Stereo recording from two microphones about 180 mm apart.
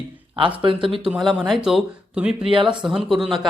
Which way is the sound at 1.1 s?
Centre (ahead or behind).